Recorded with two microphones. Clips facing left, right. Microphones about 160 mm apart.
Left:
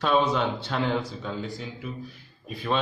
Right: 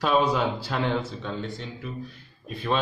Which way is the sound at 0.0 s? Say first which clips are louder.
Right 1 dB; 5° right (ahead or behind).